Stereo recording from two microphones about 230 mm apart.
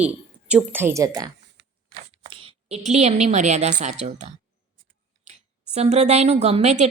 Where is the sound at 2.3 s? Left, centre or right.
Right.